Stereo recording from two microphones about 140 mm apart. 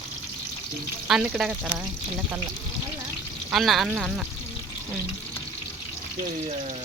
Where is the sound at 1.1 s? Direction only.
5° right (ahead or behind).